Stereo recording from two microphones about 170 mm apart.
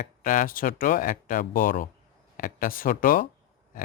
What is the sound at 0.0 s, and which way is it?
Speech, 50° left (ahead or behind).